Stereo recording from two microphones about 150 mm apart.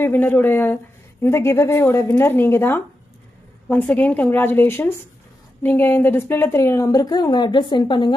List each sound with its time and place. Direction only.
0.0 s a woman's voice: 15° left (ahead or behind); by 8.1 s 30° left (ahead or behind)